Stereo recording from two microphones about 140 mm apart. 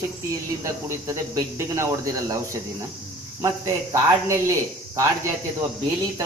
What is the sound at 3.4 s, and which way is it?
Speech, 25° right (ahead or behind).